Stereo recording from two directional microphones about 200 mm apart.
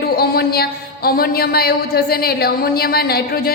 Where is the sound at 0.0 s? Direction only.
50° left (ahead or behind).